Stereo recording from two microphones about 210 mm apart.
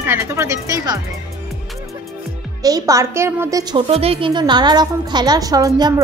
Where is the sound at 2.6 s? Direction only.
15° right (ahead or behind).